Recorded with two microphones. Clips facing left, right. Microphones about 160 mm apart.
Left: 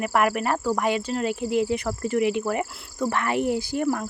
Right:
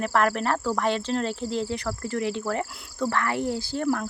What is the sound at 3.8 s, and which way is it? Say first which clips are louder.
Speech: right 2 dB; 5° left (ahead or behind).